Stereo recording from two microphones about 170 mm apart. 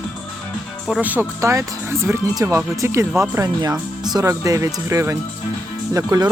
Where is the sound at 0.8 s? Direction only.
5° right (ahead or behind).